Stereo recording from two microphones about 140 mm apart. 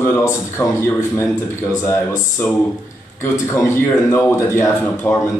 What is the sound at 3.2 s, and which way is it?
Speech, 15° left (ahead or behind).